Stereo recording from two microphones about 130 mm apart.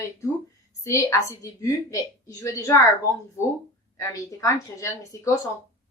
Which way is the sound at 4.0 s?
25° left (ahead or behind).